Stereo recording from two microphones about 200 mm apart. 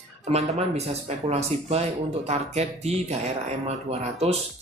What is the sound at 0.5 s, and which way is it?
Speech, 30° right (ahead or behind).